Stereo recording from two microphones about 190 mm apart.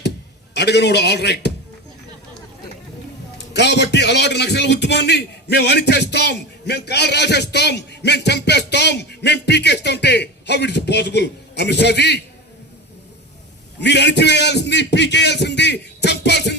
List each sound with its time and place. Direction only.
0.5 s a man's voice: 60° left (ahead or behind)
3.3 s a man's voice: 65° left (ahead or behind)
13.7 s a man's voice: 65° left (ahead or behind)